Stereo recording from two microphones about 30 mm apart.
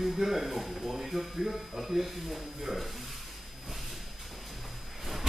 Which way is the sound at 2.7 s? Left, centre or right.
Centre.